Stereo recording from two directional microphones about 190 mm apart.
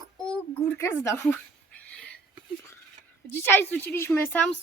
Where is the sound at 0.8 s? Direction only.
15° left (ahead or behind).